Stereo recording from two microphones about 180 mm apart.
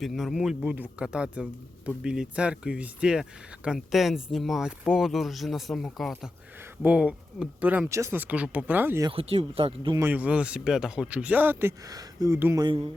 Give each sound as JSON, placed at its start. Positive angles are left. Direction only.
{"t": 0.0, "sound": "speech", "side_deg": 0}
{"t": 9.0, "sound": "speech", "side_deg": -30}
{"t": 10.0, "sound": "speech", "side_deg": -10}
{"t": 12.6, "sound": "speech", "side_deg": -25}